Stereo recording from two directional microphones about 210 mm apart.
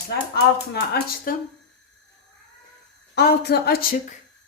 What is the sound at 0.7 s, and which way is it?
Speech, 50° left (ahead or behind).